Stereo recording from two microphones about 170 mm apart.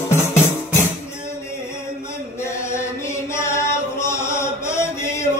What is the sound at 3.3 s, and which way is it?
Chant, 15° left (ahead or behind).